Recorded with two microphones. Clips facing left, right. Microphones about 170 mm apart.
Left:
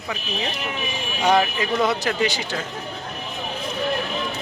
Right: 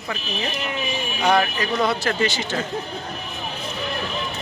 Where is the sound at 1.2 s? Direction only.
20° left (ahead or behind).